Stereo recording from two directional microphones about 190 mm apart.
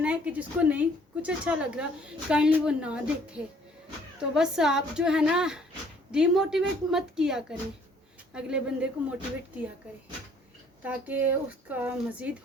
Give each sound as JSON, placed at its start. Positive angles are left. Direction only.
{"t": 0.0, "sound": "a woman's voice", "side_deg": -5}
{"t": 10.8, "sound": "speech", "side_deg": -10}